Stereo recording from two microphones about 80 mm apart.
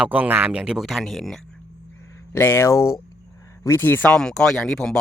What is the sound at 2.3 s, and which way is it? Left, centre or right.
Speech, left.